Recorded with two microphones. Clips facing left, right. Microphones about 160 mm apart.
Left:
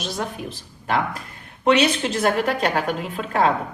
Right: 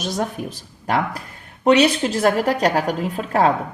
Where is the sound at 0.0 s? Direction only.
45° right (ahead or behind).